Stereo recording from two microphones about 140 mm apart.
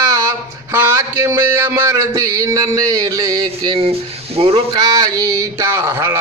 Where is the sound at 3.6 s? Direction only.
40° right (ahead or behind).